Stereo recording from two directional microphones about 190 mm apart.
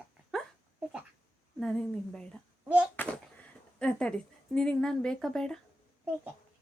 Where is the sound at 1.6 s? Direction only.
5° left (ahead or behind).